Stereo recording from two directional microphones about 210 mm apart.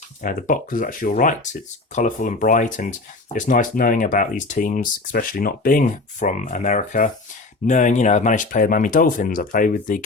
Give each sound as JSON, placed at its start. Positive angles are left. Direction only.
{"t": 0.2, "sound": "speech", "side_deg": 40}